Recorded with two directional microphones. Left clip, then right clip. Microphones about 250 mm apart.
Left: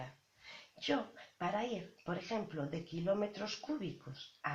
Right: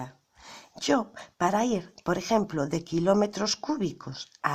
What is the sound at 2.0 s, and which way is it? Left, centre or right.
Speech, right.